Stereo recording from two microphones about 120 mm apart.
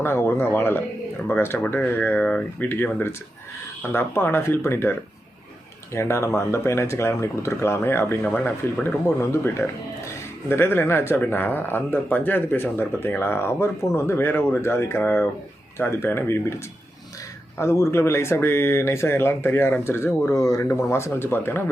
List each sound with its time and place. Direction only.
0.0 s speech: 20° left (ahead or behind)
17.6 s speech: 25° left (ahead or behind)